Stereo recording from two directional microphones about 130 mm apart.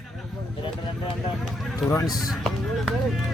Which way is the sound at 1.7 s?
25° left (ahead or behind).